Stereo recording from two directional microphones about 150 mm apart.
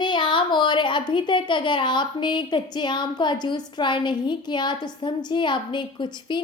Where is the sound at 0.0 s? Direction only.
30° left (ahead or behind).